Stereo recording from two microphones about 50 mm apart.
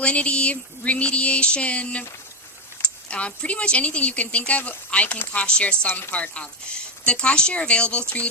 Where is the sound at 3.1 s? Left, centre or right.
Left.